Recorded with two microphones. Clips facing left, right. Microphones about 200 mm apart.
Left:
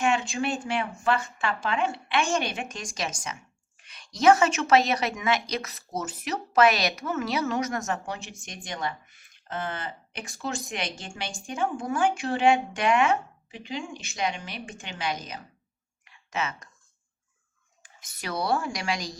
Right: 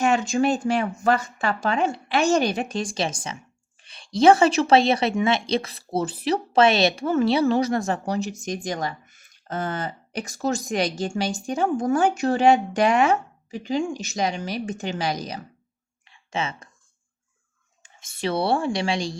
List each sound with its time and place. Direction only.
0.0 s speech: 40° right (ahead or behind)
16.0 s a sound: 30° right (ahead or behind)
17.8 s speech: 25° right (ahead or behind)